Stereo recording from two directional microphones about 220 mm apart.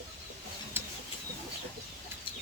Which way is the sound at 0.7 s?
10° right (ahead or behind).